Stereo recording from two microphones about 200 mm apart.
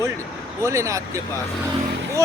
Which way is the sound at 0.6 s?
15° right (ahead or behind).